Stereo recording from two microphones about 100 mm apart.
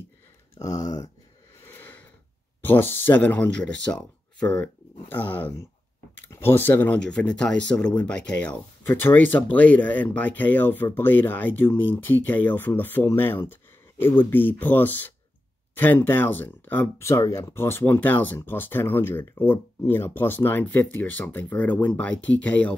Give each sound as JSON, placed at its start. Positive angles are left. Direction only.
{"t": 0.6, "sound": "speech", "side_deg": 35}
{"t": 1.6, "sound": "a sound", "side_deg": 20}
{"t": 2.6, "sound": "speech", "side_deg": 20}